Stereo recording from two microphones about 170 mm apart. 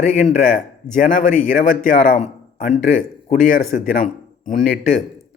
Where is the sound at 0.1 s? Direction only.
50° left (ahead or behind).